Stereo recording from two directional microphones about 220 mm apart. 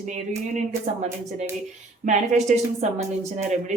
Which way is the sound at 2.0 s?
35° right (ahead or behind).